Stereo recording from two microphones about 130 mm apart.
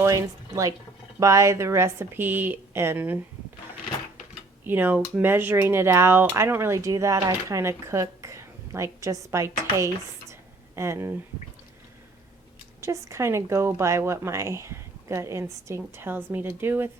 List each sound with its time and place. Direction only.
0.0 s speech: 25° right (ahead or behind)
4.6 s speech: 15° right (ahead or behind)
12.8 s speech: 25° right (ahead or behind)